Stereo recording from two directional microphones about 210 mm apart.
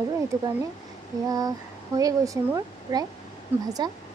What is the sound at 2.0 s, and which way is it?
A woman's voice, 15° right (ahead or behind).